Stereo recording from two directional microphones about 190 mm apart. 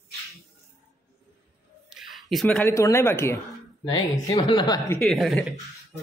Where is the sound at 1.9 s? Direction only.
Centre (ahead or behind).